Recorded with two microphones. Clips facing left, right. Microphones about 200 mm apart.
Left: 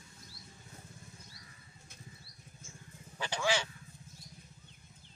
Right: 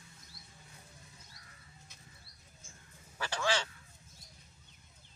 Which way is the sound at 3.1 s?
15° left (ahead or behind).